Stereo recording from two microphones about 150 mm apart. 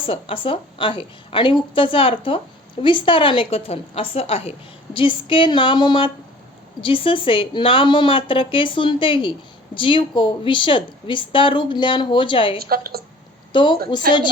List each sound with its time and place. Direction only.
0.0 s a woman's voice: 35° left (ahead or behind)
12.5 s a woman's voice: 85° right
13.5 s a woman's voice: 30° left (ahead or behind)